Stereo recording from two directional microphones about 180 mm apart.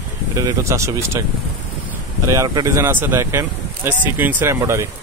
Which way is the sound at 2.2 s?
20° right (ahead or behind).